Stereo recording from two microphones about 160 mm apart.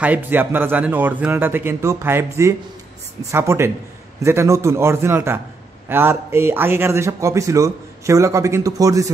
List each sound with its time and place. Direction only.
0.0 s a man's voice: 10° right (ahead or behind)